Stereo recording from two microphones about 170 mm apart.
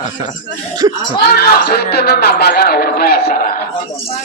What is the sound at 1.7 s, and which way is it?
A man's voice, 70° left (ahead or behind).